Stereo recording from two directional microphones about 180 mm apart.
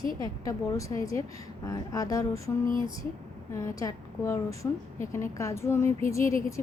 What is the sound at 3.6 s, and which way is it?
A woman's voice, 15° left (ahead or behind).